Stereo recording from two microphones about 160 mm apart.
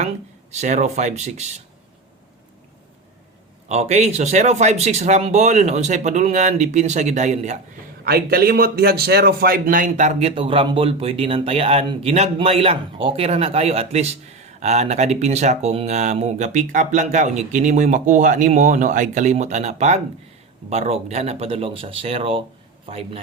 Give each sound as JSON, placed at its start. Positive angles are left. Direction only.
{"t": 0.5, "sound": "a man's voice", "side_deg": -45}
{"t": 3.7, "sound": "a man's voice", "side_deg": -45}
{"t": 8.0, "sound": "a man's voice", "side_deg": -75}